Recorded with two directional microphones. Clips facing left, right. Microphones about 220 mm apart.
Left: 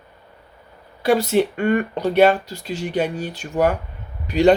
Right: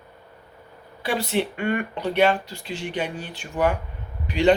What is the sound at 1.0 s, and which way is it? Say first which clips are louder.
Speech: left 7 dB; 45° left (ahead or behind).